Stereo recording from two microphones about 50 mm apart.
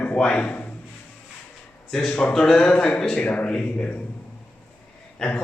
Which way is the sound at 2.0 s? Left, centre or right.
Centre.